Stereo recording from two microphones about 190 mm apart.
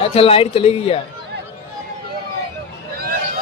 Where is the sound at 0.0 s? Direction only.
30° left (ahead or behind).